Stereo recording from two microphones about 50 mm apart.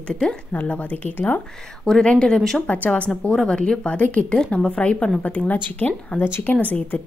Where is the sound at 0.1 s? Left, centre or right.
Centre.